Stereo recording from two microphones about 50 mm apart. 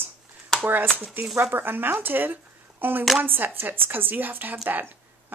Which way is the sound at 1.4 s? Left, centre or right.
Right.